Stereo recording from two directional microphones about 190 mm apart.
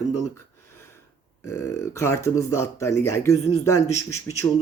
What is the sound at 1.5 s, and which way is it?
A man's voice, 15° left (ahead or behind).